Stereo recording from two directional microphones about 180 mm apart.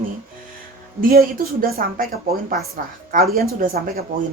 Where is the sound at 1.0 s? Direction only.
55° right (ahead or behind).